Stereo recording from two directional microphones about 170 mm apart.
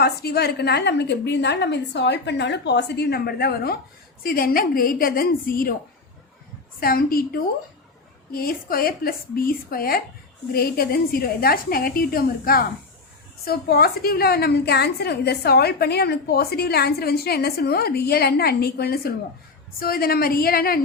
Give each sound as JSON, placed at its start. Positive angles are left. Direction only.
{"t": 0.0, "sound": "a woman's voice", "side_deg": 70}
{"t": 6.7, "sound": "a woman's voice", "side_deg": 60}
{"t": 8.3, "sound": "a woman's voice", "side_deg": 60}